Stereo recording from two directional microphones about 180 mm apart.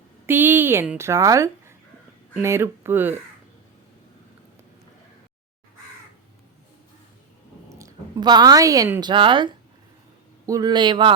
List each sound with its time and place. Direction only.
0.3 s a woman's voice: 10° right (ahead or behind)
7.8 s a woman's voice: 20° right (ahead or behind)